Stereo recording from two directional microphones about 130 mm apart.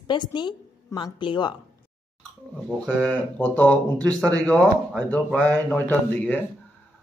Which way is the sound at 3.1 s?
10° left (ahead or behind).